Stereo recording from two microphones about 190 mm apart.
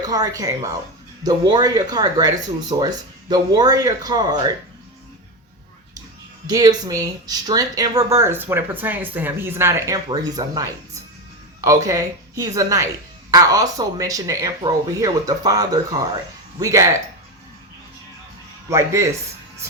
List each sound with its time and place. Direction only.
0.0 s speech: 20° right (ahead or behind)
6.5 s speech: 20° right (ahead or behind)
18.7 s speech: 15° right (ahead or behind)